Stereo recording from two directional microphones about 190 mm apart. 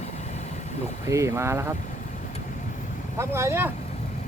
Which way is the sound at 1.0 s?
15° right (ahead or behind).